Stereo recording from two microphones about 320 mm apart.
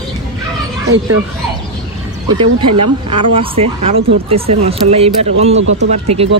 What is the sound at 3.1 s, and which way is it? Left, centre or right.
Speech, centre.